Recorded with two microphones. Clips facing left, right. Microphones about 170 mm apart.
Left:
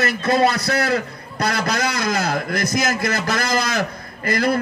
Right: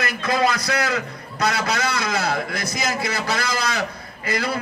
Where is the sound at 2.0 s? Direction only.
45° left (ahead or behind).